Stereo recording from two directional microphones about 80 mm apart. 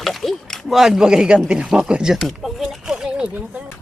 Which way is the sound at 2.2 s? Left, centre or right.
Centre.